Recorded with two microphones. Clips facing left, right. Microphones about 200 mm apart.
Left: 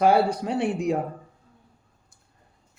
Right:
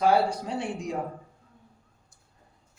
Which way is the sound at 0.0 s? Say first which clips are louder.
Left 3 dB; 60° left (ahead or behind).